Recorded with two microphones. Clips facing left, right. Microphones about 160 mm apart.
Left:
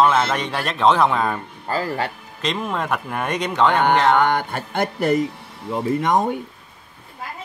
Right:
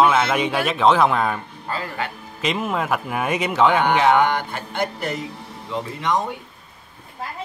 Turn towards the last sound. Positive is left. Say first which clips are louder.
# left 5 dB
turn(degrees=50)  # may be behind; listen again after turning